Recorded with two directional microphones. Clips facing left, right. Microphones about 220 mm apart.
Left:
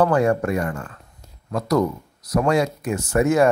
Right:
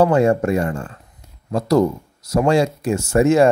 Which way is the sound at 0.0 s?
25° right (ahead or behind).